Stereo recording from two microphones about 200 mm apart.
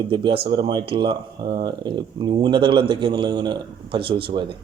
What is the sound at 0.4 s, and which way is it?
A man's voice, 25° right (ahead or behind).